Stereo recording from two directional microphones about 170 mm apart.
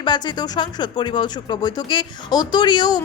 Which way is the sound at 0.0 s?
25° left (ahead or behind).